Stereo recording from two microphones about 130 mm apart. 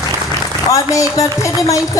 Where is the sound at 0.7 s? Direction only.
25° left (ahead or behind).